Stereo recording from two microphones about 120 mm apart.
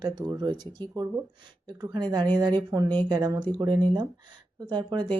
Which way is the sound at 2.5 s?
35° right (ahead or behind).